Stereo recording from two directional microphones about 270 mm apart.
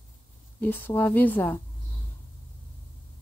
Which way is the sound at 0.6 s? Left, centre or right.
Centre.